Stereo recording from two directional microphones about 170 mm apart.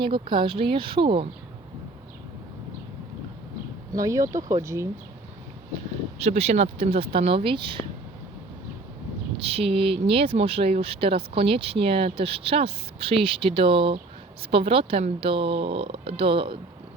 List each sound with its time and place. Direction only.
0.0 s speech: 30° right (ahead or behind)
3.9 s speech: 20° right (ahead or behind)
6.1 s speech: 40° right (ahead or behind)
9.4 s speech: 35° right (ahead or behind)